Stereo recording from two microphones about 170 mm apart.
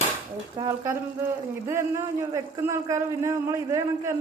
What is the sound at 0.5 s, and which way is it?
Speech, 20° right (ahead or behind).